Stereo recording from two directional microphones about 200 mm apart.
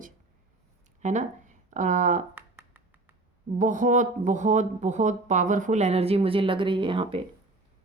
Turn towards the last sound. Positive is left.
turn(degrees=-25)  # may be behind; listen again after turning